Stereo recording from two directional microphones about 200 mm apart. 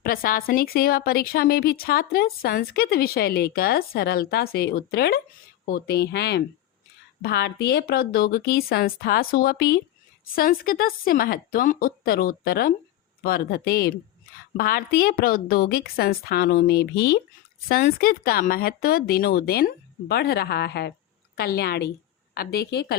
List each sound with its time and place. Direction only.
0.0 s a woman's voice: 45° left (ahead or behind)